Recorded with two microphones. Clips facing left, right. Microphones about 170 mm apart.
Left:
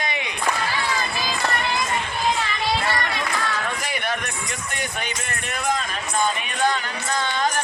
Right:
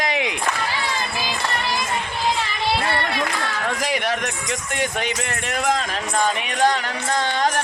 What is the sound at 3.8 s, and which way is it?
Music, 90° right.